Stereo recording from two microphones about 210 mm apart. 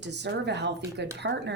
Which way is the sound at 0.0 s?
55° right (ahead or behind).